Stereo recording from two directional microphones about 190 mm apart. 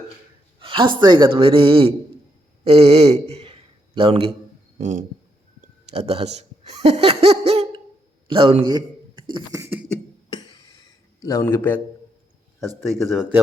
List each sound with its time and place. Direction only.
0.6 s a woman's voice: 25° right (ahead or behind)
4.8 s speech: 45° right (ahead or behind)
5.9 s a man's voice: 35° right (ahead or behind); by 9.8 s 15° right (ahead or behind)
10.2 s music: 20° left (ahead or behind)
11.2 s a man's voice: 15° left (ahead or behind); by 13.4 s centre (ahead or behind)